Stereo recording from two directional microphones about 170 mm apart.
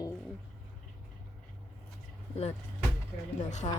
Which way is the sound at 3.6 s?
35° left (ahead or behind).